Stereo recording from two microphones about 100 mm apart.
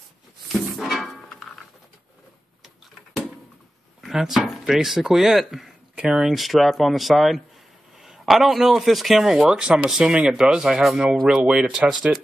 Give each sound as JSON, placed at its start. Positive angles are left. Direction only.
{"t": 0.5, "sound": "music", "side_deg": 0}
{"t": 2.6, "sound": "a sound", "side_deg": 0}
{"t": 4.0, "sound": "speech", "side_deg": -5}